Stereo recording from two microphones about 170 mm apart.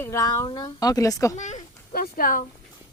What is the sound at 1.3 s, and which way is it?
Speech, 45° left (ahead or behind).